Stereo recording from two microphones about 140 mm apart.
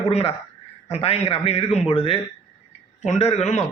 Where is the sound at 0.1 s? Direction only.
45° left (ahead or behind).